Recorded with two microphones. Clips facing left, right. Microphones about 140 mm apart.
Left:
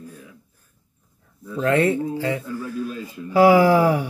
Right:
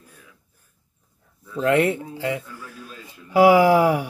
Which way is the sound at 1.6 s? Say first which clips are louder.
Left 1 dB; 20° right (ahead or behind).